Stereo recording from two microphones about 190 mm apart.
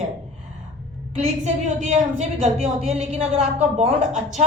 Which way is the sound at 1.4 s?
40° right (ahead or behind).